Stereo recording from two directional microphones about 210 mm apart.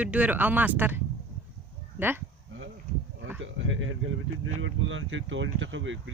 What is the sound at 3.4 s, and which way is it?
Speech, 65° right (ahead or behind).